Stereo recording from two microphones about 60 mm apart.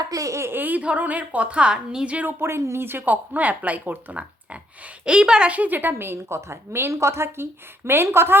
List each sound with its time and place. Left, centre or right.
0.1 s a sound: right
0.4 s a sound: right
0.8 s a woman's voice: right
2.4 s speech: right
3.0 s a woman's voice: right
5.5 s a woman's voice: right